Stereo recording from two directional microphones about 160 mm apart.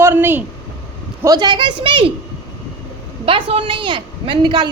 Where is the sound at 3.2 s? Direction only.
35° right (ahead or behind).